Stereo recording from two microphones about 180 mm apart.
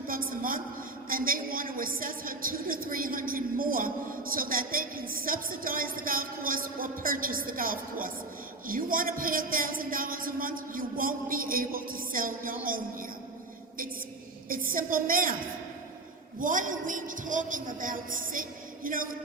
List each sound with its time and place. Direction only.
0.1 s a sound: 50° right (ahead or behind)
4.4 s a man's voice: 50° right (ahead or behind)
14.5 s a woman's voice: 50° right (ahead or behind)
16.4 s a man's voice: 45° right (ahead or behind)